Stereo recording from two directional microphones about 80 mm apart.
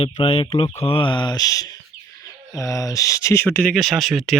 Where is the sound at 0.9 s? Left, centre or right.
Left.